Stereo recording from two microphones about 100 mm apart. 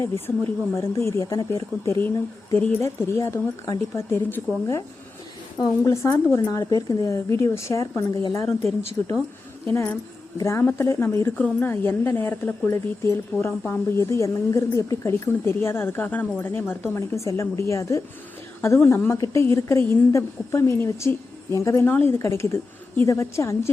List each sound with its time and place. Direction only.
0.0 s a woman's voice: 25° left (ahead or behind)
5.5 s a woman's voice: 40° left (ahead or behind)
10.4 s a woman's voice: 25° left (ahead or behind)